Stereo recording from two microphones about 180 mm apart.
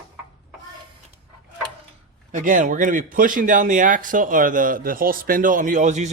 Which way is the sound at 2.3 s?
45° right (ahead or behind).